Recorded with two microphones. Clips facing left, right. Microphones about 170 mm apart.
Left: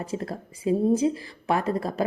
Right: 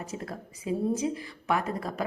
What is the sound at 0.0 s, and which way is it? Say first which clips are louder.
A woman's voice: left 6 dB; 30° left (ahead or behind).